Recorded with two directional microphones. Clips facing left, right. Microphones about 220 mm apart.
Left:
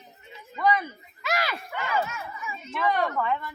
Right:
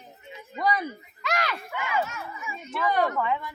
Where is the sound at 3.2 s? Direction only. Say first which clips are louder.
Even; 10° right (ahead or behind).